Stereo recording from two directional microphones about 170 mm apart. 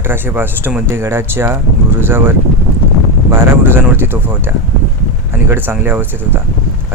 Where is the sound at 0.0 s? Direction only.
15° right (ahead or behind).